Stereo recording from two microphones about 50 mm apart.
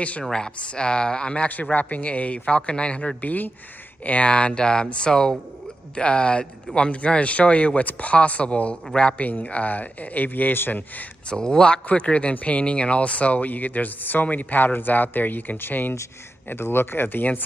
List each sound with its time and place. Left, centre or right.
0.2 s speech: centre
1.5 s a man's voice: left
3.3 s a man's voice: left
11.2 s speech: centre; by 17.4 s left